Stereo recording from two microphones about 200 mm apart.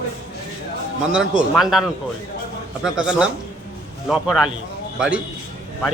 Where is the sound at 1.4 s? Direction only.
Centre (ahead or behind).